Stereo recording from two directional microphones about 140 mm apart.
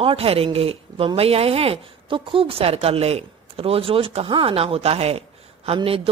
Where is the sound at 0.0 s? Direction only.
40° right (ahead or behind).